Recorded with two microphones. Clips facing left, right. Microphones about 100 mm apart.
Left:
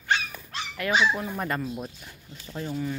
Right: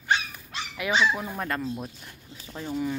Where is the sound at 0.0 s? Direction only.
10° right (ahead or behind).